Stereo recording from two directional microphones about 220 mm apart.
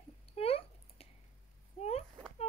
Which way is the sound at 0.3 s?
25° left (ahead or behind).